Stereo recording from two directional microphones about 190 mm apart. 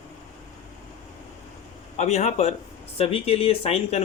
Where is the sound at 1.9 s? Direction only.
35° left (ahead or behind).